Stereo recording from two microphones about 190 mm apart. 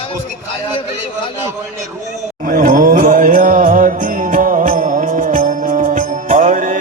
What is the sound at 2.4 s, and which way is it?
Music, 45° right (ahead or behind).